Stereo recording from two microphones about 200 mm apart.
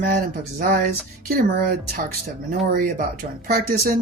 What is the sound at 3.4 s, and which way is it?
Speech, 45° right (ahead or behind).